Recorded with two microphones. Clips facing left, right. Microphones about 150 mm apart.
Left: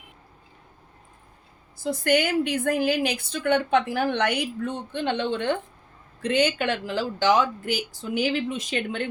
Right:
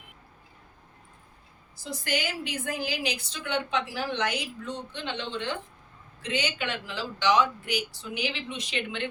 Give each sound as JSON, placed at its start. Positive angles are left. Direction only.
{"t": 1.8, "sound": "a woman's voice", "side_deg": 55}